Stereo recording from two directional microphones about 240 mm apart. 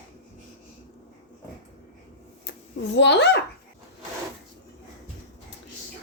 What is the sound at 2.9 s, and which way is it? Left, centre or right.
Speech, left.